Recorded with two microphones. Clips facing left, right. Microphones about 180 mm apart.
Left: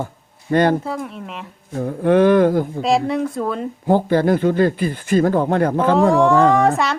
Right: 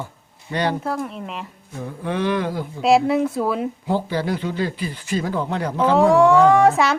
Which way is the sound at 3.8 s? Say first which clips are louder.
Left 9 dB; 50° left (ahead or behind).